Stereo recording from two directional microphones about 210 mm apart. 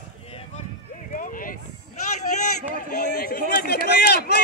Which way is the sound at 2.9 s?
45° left (ahead or behind).